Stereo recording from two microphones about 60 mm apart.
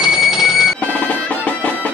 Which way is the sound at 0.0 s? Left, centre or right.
Centre.